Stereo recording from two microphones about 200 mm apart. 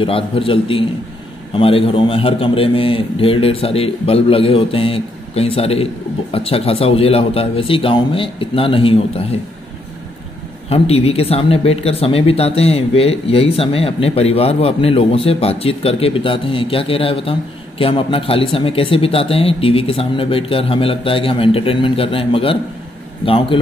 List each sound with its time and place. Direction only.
0.0 s speech: 25° left (ahead or behind)
10.7 s speech: 30° left (ahead or behind)